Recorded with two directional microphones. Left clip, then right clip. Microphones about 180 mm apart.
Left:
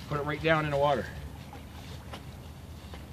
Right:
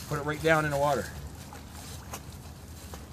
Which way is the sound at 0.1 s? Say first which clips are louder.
Right 2 dB; 45° right (ahead or behind).